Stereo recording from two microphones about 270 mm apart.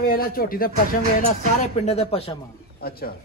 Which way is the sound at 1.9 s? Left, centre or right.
Left.